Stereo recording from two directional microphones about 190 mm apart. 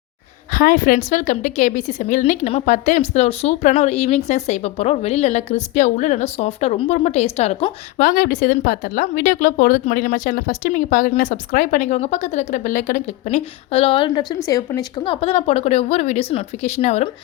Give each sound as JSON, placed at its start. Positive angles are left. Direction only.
{"t": 0.5, "sound": "speech", "side_deg": 50}
{"t": 7.9, "sound": "speech", "side_deg": 45}